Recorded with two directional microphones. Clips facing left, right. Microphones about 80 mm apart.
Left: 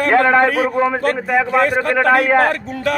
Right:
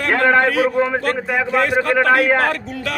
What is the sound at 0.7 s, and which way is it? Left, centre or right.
Speech, centre.